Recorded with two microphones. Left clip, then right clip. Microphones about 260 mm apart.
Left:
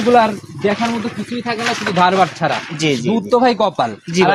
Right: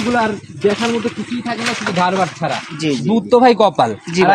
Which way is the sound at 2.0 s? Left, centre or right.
Centre.